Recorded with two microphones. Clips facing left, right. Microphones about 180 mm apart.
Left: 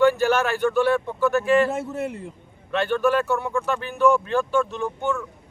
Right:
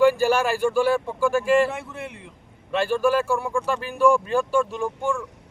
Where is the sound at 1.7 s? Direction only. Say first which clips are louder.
Left 7 dB; 40° left (ahead or behind).